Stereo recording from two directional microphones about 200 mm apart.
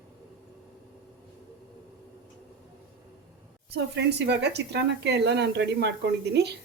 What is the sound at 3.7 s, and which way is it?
A woman's voice, 55° right (ahead or behind).